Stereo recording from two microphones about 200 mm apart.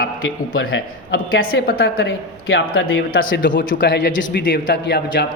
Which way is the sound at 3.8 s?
60° left (ahead or behind).